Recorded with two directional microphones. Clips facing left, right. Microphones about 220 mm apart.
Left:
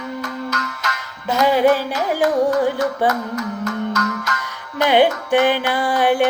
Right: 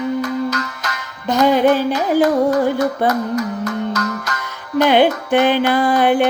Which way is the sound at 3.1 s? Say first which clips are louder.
Right 4 dB; 35° right (ahead or behind).